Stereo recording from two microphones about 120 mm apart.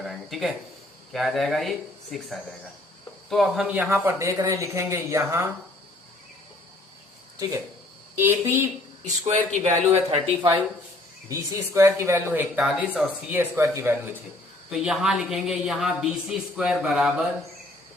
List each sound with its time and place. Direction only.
0.0 s speech: centre (ahead or behind); by 5.5 s 20° right (ahead or behind)
8.1 s speech: 20° right (ahead or behind)
9.6 s speech: 55° right (ahead or behind)
11.3 s speech: 25° right (ahead or behind)
14.7 s speech: 5° right (ahead or behind)